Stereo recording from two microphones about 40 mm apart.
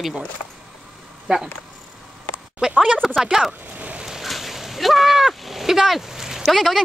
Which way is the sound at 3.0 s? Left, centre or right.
Centre.